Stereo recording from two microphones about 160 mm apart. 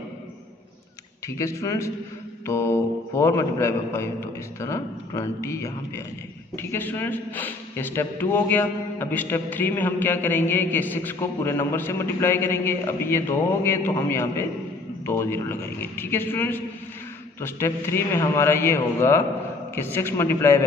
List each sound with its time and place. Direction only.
1.2 s a man's voice: 20° left (ahead or behind)